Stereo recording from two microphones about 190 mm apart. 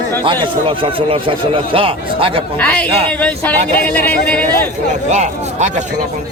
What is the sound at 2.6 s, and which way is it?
Speech, 5° left (ahead or behind).